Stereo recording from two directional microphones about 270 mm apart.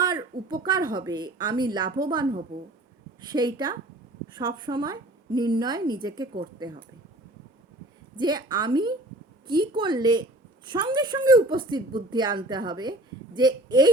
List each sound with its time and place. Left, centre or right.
0.0 s a woman's voice: centre
8.1 s a woman's voice: centre